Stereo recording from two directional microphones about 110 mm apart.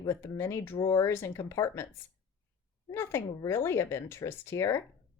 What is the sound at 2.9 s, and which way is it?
Speech, 20° left (ahead or behind).